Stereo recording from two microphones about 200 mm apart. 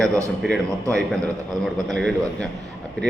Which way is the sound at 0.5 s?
5° left (ahead or behind).